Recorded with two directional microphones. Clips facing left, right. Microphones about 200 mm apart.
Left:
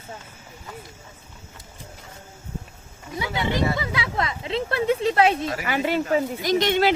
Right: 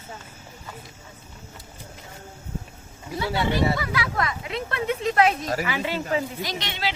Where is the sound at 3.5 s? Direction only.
20° left (ahead or behind).